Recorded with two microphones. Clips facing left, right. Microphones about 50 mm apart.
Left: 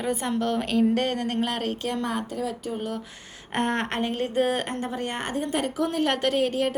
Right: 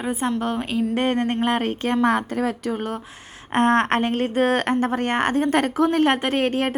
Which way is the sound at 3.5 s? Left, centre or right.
Right.